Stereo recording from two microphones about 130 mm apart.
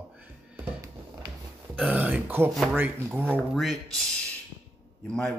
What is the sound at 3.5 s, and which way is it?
Speech, centre (ahead or behind).